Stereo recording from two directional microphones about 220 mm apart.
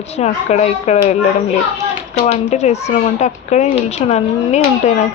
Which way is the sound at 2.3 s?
30° left (ahead or behind).